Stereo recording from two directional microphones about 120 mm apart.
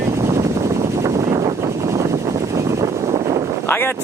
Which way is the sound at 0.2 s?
25° right (ahead or behind).